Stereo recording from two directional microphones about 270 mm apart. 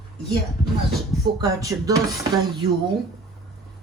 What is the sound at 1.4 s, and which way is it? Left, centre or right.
Speech, centre.